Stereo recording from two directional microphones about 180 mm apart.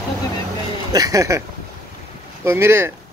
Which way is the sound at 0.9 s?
20° right (ahead or behind).